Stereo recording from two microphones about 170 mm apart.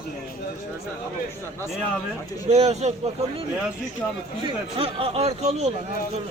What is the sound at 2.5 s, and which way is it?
Speech, 40° right (ahead or behind).